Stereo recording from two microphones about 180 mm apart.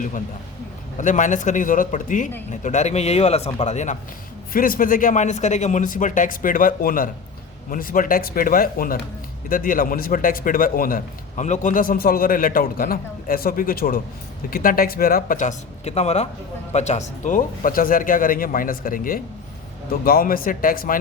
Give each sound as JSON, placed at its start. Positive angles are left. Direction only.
{"t": 0.9, "sound": "a man's voice", "side_deg": 45}
{"t": 4.5, "sound": "a man's voice", "side_deg": 50}